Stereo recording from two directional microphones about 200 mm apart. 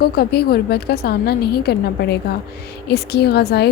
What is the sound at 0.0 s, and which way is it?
A woman's voice, 50° left (ahead or behind).